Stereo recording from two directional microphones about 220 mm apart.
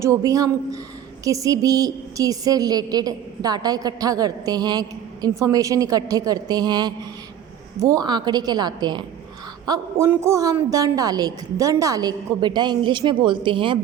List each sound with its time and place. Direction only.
0.0 s a woman's voice: 15° right (ahead or behind)